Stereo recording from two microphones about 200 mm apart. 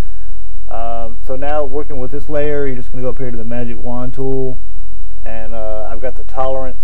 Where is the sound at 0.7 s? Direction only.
15° right (ahead or behind).